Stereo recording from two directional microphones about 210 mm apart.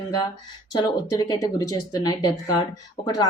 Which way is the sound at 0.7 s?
20° left (ahead or behind).